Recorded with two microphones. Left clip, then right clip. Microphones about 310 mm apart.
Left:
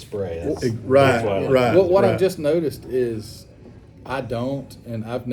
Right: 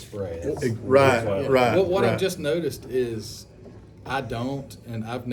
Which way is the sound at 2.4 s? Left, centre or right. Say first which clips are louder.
Left 5 dB; centre.